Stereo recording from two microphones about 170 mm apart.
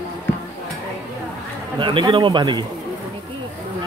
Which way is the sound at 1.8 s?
30° right (ahead or behind).